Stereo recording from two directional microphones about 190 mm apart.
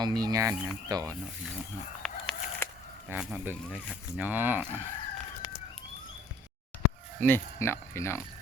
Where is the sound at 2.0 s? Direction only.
Centre (ahead or behind).